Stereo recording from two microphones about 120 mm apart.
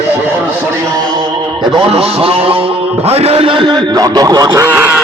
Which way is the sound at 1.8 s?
55° right (ahead or behind).